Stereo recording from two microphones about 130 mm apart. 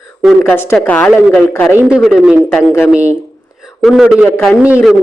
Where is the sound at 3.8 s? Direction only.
Centre (ahead or behind).